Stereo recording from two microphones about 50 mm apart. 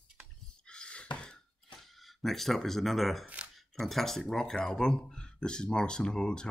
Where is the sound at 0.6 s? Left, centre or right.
Centre.